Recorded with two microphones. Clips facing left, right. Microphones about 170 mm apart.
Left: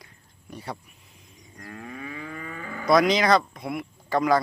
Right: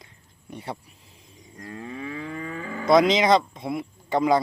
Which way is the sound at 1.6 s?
25° right (ahead or behind).